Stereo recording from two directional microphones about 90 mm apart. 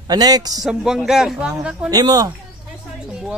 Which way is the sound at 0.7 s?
5° right (ahead or behind).